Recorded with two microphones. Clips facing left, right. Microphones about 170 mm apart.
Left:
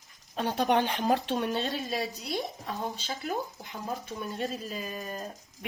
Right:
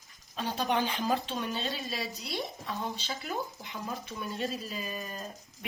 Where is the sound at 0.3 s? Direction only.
60° left (ahead or behind).